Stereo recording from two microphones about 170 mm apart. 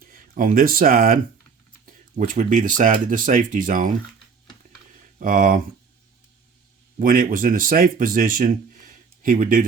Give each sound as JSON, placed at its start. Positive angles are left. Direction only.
{"t": 0.0, "sound": "speech", "side_deg": -55}
{"t": 5.2, "sound": "speech", "side_deg": -55}
{"t": 7.0, "sound": "speech", "side_deg": -55}